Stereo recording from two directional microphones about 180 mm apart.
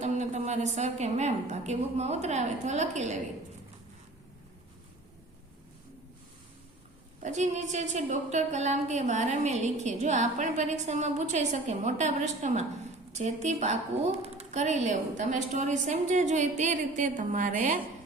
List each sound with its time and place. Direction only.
0.0 s a woman's voice: 40° right (ahead or behind)
7.2 s a woman's voice: 40° right (ahead or behind)